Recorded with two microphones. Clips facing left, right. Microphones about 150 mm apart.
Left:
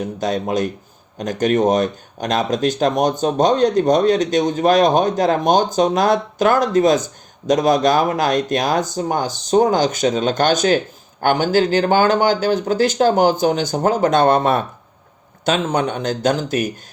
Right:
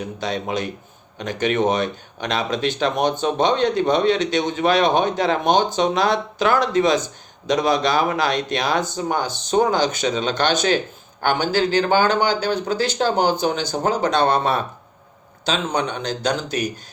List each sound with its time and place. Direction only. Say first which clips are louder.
0.0 s speech: left 5 dB; 45° left (ahead or behind)